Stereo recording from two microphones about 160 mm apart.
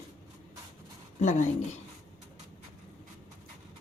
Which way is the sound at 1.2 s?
50° left (ahead or behind).